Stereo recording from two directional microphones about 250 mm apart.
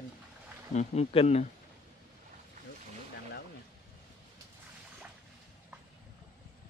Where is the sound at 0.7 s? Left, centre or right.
Left.